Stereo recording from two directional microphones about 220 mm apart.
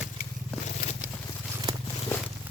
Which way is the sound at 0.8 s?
45° left (ahead or behind).